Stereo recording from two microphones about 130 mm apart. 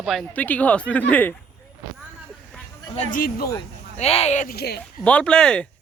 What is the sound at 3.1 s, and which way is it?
Speech, 90° left.